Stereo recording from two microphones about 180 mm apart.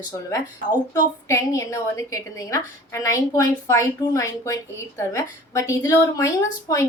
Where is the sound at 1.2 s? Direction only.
15° left (ahead or behind).